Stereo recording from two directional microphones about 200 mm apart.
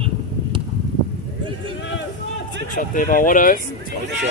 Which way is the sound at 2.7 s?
45° left (ahead or behind).